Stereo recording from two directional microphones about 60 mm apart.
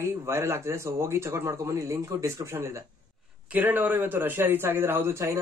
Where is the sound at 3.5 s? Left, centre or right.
Right.